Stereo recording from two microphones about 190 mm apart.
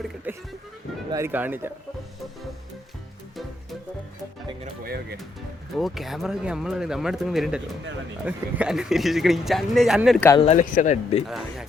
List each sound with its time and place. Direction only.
0.3 s speech: 10° right (ahead or behind)
5.7 s speech: centre (ahead or behind)
10.2 s speech: 15° left (ahead or behind)
10.4 s speech: 40° left (ahead or behind)
11.3 s speech: centre (ahead or behind)